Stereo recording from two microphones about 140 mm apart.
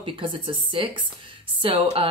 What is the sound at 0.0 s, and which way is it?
A woman's voice, 40° right (ahead or behind).